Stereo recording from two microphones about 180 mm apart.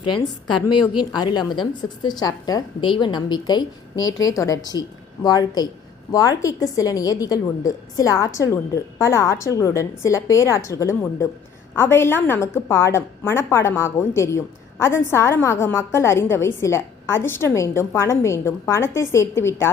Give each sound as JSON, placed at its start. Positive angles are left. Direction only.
{"t": 0.0, "sound": "a woman's voice", "side_deg": 25}